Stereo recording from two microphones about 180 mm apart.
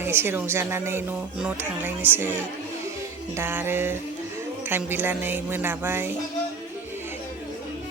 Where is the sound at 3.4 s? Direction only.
10° right (ahead or behind).